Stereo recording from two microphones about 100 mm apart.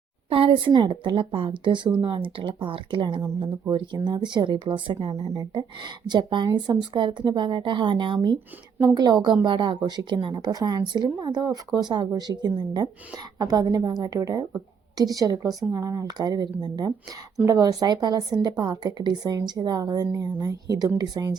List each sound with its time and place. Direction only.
0.3 s a woman's voice: 65° right (ahead or behind)
5.5 s a woman's voice: 50° right (ahead or behind)
17.4 s a woman's voice: 35° right (ahead or behind)